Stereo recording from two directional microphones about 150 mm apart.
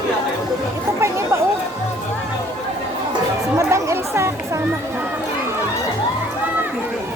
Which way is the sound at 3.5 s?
20° right (ahead or behind).